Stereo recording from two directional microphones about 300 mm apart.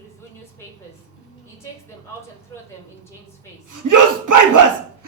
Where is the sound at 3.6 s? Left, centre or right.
Right.